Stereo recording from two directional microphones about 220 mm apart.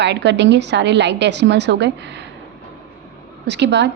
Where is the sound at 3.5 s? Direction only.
50° right (ahead or behind).